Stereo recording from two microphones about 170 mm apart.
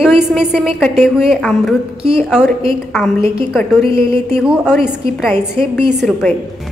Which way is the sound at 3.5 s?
Centre (ahead or behind).